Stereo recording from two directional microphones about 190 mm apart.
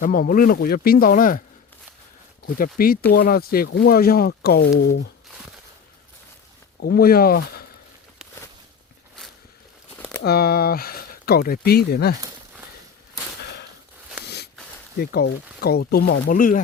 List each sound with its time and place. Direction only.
0.0 s speech: 50° left (ahead or behind)
2.6 s speech: 50° left (ahead or behind)
4.7 s speech: 80° left
6.7 s speech: 60° left (ahead or behind)
10.2 s speech: 55° left (ahead or behind)
14.3 s a sound: 60° left (ahead or behind)
15.6 s speech: 55° left (ahead or behind)